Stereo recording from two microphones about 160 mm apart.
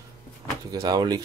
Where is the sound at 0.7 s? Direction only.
25° right (ahead or behind).